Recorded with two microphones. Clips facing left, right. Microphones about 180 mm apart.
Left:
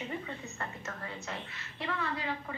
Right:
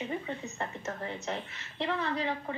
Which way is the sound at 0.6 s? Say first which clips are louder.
Right 4 dB; 25° right (ahead or behind).